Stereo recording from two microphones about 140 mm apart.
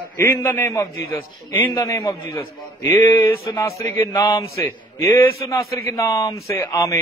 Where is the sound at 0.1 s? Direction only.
20° left (ahead or behind).